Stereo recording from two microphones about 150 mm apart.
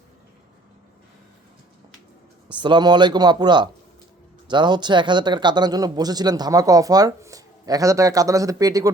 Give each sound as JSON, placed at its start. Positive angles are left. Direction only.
{"t": 2.5, "sound": "speech", "side_deg": -30}